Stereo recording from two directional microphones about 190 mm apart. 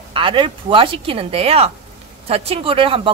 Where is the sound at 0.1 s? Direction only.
25° right (ahead or behind).